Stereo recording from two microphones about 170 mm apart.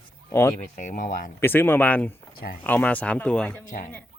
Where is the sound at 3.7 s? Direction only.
50° left (ahead or behind).